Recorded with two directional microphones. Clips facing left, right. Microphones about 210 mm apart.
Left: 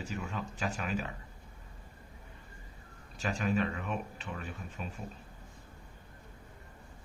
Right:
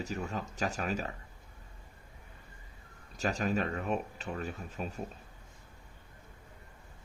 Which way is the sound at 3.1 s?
40° right (ahead or behind).